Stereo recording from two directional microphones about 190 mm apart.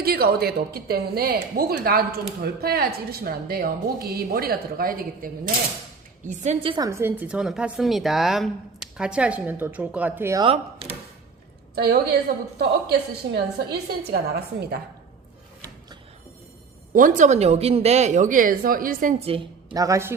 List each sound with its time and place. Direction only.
0.0 s a woman's voice: 55° right (ahead or behind); by 10.4 s 10° right (ahead or behind)
11.7 s a woman's voice: 60° right (ahead or behind)
16.9 s speech: 45° right (ahead or behind)
19.2 s a woman's voice: 30° right (ahead or behind)